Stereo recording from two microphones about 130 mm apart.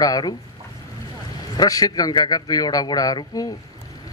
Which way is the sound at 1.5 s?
30° left (ahead or behind).